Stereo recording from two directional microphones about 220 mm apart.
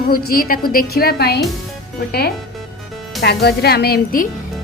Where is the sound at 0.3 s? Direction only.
40° left (ahead or behind).